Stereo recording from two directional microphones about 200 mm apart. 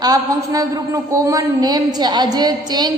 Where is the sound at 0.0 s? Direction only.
20° right (ahead or behind).